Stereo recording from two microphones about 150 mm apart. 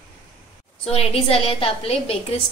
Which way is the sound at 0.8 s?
40° left (ahead or behind).